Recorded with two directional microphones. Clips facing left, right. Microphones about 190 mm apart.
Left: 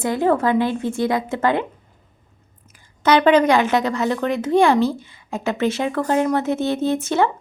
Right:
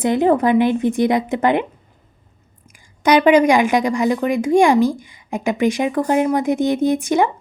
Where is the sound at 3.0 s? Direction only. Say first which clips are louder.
Right 2 dB; 10° right (ahead or behind).